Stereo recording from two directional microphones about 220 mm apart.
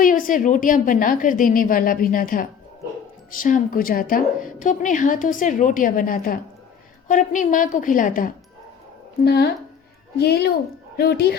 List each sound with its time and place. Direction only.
0.0 s a woman's voice: 40° left (ahead or behind)
9.2 s a woman's voice: 50° left (ahead or behind)